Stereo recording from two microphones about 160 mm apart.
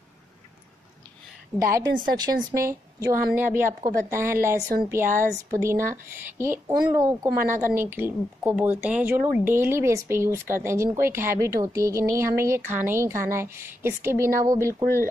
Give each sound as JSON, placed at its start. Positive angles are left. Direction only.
{"t": 1.6, "sound": "speech", "side_deg": -20}
{"t": 1.9, "sound": "a woman's voice", "side_deg": -65}
{"t": 2.5, "sound": "speech", "side_deg": -15}